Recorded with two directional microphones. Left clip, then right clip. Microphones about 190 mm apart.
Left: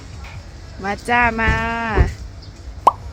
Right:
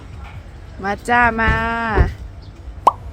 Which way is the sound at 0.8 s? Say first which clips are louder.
Right 2 dB; 5° right (ahead or behind).